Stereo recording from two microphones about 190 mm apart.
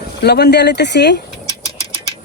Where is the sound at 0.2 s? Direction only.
60° left (ahead or behind).